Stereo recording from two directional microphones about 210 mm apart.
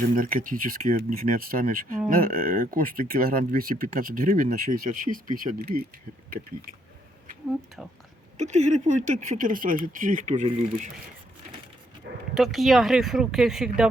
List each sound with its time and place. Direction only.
0.2 s speech: 40° right (ahead or behind)
7.8 s speech: centre (ahead or behind)
8.4 s speech: 35° right (ahead or behind)
12.3 s speech: centre (ahead or behind)